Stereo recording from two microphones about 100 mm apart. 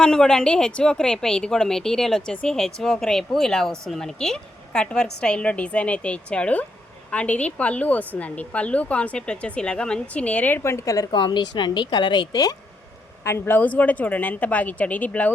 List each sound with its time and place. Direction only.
0.0 s a woman's voice: 5° left (ahead or behind); by 11.0 s 30° left (ahead or behind)
11.1 s speech: 50° left (ahead or behind)
13.2 s a woman's voice: 25° left (ahead or behind)